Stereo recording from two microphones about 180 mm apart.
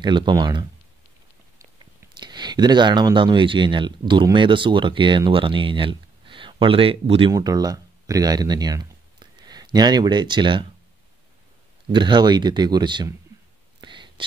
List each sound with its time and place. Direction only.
0.0 s speech: 25° right (ahead or behind)
2.1 s speech: 25° right (ahead or behind)
11.9 s speech: 25° right (ahead or behind)
13.7 s whispering: 25° right (ahead or behind)